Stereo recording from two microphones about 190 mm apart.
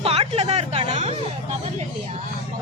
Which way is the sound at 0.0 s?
35° right (ahead or behind).